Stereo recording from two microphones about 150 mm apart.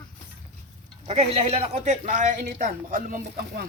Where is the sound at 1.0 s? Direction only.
45° right (ahead or behind); by 3.7 s 85° right.